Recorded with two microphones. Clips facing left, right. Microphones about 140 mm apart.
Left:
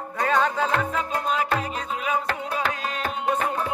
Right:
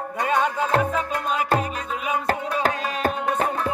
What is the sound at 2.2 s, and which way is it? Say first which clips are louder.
Music: right 4 dB; 40° right (ahead or behind).